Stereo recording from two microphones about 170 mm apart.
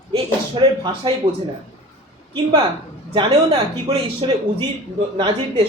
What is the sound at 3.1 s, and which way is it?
A man's voice, 30° right (ahead or behind).